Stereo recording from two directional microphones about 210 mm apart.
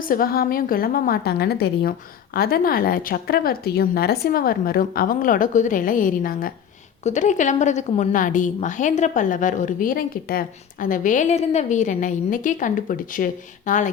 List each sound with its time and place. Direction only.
0.1 s a woman's voice: 45° left (ahead or behind)